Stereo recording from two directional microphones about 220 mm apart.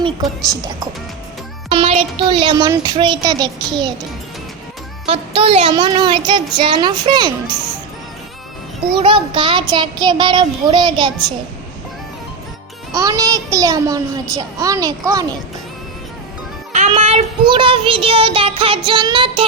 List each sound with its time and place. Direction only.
0.0 s a child's voice: 20° right (ahead or behind)
1.7 s speech: 25° right (ahead or behind)
5.0 s speech: 25° right (ahead or behind)
8.9 s speech: 25° right (ahead or behind)
12.9 s a child's voice: 15° right (ahead or behind)
16.7 s child singing: 30° right (ahead or behind)
18.9 s speech: 20° right (ahead or behind)